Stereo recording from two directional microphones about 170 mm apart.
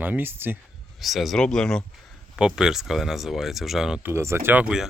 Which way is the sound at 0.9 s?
Centre (ahead or behind).